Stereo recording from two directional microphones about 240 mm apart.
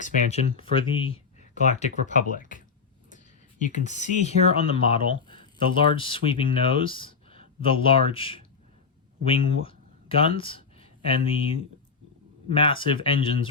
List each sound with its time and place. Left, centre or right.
0.0 s speech: left
2.0 s speech: left
3.8 s speech: left